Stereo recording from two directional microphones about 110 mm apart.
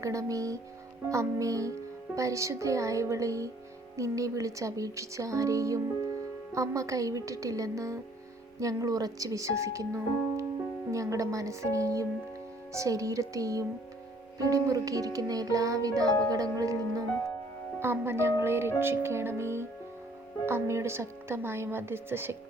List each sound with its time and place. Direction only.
0.0 s speech: 30° right (ahead or behind)
14.3 s music: 30° right (ahead or behind)
17.7 s speech: 20° right (ahead or behind)